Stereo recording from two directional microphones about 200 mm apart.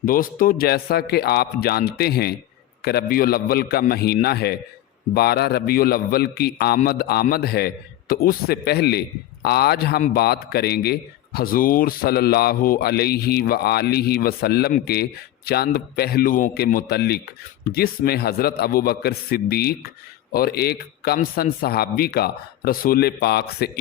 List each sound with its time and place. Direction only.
0.0 s speech: 45° left (ahead or behind)